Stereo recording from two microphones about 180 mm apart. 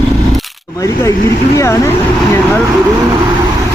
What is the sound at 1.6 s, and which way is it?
Speech, 15° left (ahead or behind).